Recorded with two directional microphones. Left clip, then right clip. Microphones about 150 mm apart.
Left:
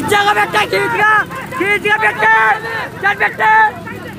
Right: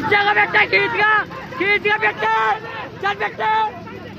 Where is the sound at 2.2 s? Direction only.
10° right (ahead or behind).